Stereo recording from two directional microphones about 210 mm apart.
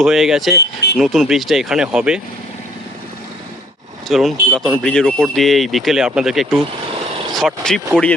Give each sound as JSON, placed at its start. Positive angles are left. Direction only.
{"t": 0.0, "sound": "speech", "side_deg": 0}
{"t": 0.5, "sound": "speech", "side_deg": 50}
{"t": 0.9, "sound": "speech", "side_deg": 0}
{"t": 4.1, "sound": "speech", "side_deg": 0}